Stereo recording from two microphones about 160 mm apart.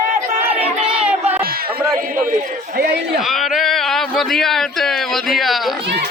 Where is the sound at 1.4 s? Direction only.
70° right (ahead or behind).